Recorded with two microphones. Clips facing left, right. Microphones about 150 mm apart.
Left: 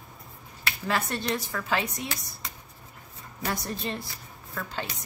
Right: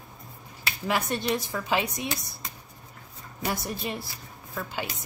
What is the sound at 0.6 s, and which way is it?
A woman's voice, 15° right (ahead or behind).